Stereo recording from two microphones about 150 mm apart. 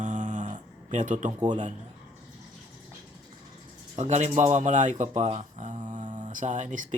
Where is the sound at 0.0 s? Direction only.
55° right (ahead or behind).